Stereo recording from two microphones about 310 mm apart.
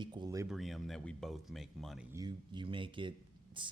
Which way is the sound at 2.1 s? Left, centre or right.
Centre.